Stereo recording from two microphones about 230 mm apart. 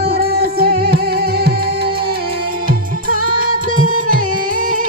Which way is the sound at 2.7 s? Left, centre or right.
Right.